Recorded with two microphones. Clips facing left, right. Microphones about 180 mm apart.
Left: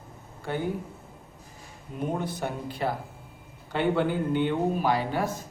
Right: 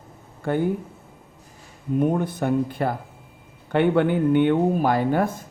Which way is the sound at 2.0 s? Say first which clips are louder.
Right 8 dB; 55° right (ahead or behind).